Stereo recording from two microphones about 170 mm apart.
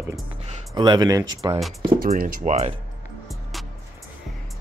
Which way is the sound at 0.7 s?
25° right (ahead or behind).